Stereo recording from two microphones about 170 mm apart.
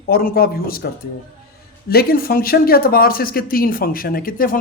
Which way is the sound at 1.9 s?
65° left (ahead or behind).